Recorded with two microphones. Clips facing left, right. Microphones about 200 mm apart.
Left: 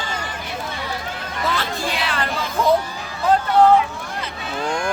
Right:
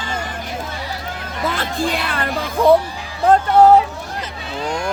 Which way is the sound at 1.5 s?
50° right (ahead or behind).